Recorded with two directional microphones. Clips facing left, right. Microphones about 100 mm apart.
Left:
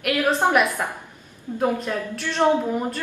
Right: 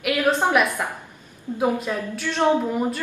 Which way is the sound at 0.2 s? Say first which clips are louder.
Even; 10° left (ahead or behind).